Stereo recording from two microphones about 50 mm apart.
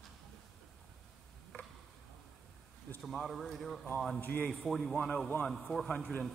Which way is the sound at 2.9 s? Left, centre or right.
Left.